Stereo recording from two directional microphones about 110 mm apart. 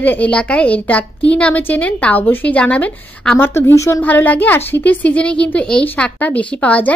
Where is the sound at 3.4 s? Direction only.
20° left (ahead or behind).